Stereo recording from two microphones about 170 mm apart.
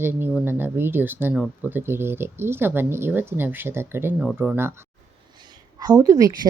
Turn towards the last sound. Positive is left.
turn(degrees=-20)  # may be behind; listen again after turning